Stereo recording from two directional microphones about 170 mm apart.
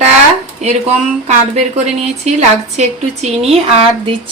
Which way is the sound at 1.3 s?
40° right (ahead or behind).